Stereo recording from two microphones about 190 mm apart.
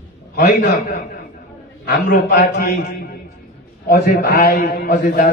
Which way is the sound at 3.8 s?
55° left (ahead or behind).